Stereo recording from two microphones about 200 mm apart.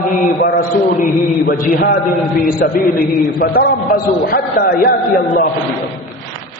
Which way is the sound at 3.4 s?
50° left (ahead or behind).